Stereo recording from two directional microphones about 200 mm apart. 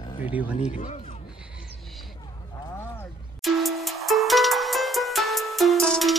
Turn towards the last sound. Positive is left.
turn(degrees=0)  # may be behind; listen again after turning